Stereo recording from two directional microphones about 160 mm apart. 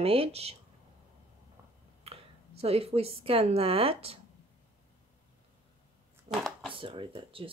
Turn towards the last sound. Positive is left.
turn(degrees=-35)  # may be behind; listen again after turning